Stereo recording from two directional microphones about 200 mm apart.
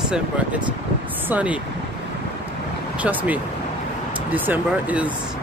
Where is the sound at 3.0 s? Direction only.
5° right (ahead or behind).